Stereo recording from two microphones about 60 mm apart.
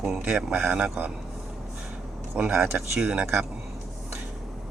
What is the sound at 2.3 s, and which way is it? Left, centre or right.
Speech, centre.